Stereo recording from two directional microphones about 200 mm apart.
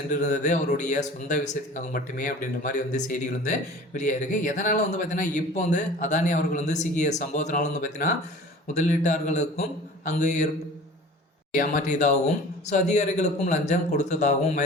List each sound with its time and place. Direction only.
0.1 s a man's voice: 40° left (ahead or behind)
11.5 s a man's voice: 40° left (ahead or behind)